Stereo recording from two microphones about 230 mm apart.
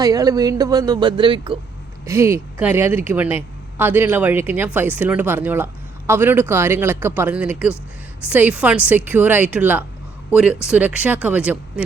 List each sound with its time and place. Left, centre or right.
0.0 s speech: centre
2.0 s speech: centre